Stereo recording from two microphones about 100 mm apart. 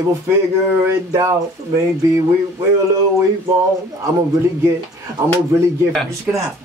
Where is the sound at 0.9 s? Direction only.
30° right (ahead or behind).